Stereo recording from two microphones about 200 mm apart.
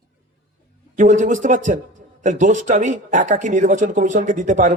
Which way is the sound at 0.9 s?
40° right (ahead or behind).